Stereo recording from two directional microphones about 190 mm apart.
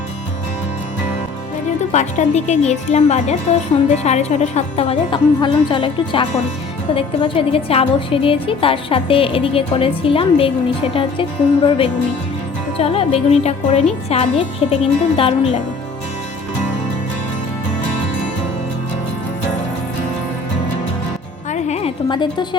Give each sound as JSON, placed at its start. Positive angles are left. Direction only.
{"t": 1.9, "sound": "a woman's voice", "side_deg": 40}
{"t": 21.5, "sound": "music", "side_deg": 35}